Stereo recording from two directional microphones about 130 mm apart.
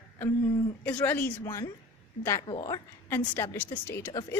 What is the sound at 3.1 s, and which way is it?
A woman's voice, 15° left (ahead or behind).